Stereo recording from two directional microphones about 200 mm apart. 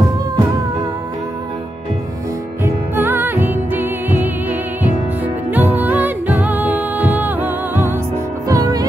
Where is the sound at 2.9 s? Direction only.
10° right (ahead or behind).